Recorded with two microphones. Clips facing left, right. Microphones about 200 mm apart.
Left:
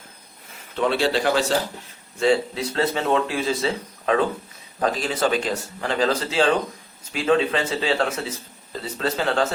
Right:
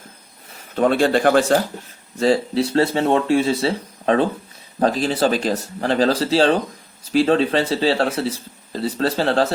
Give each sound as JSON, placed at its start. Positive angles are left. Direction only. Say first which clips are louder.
{"t": 0.8, "sound": "speech", "louder": "right 5 dB", "side_deg": -50}
{"t": 2.1, "sound": "speech", "louder": "right 3 dB", "side_deg": -35}